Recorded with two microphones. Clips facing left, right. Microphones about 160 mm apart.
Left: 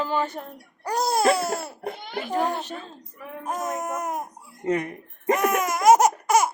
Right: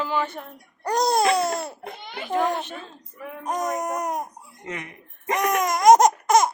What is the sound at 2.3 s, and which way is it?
Speech, 35° left (ahead or behind).